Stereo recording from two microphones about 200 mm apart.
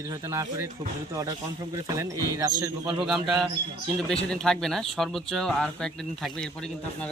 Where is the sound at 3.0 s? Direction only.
Centre (ahead or behind).